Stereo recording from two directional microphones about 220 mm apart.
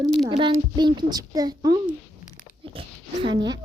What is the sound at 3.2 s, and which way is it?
Speech, 20° right (ahead or behind).